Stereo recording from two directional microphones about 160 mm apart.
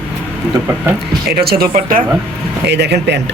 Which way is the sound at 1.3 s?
75° right (ahead or behind).